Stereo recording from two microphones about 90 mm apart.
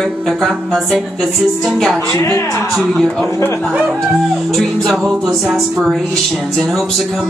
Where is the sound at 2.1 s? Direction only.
25° left (ahead or behind).